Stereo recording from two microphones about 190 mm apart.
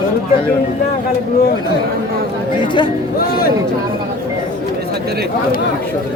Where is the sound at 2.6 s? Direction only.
25° left (ahead or behind).